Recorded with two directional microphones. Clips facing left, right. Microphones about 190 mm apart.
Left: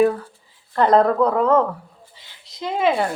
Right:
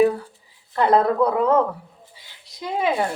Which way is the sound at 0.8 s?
10° right (ahead or behind).